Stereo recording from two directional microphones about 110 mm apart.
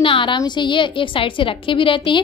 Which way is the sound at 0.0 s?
50° left (ahead or behind).